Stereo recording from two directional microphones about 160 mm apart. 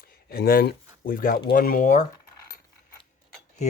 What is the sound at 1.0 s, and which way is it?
Speech, 60° left (ahead or behind).